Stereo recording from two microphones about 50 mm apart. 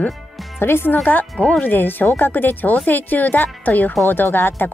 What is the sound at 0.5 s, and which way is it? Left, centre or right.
Speech, left.